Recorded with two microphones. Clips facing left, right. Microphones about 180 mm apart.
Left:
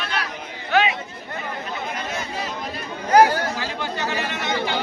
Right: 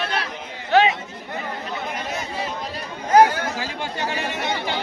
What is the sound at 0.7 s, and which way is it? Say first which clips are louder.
Chatter: right 3 dB; 35° right (ahead or behind).